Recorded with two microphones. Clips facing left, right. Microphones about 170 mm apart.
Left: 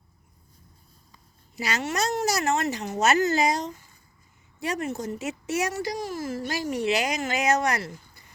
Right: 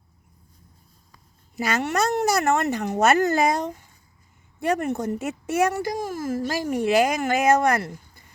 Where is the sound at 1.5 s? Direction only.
50° right (ahead or behind).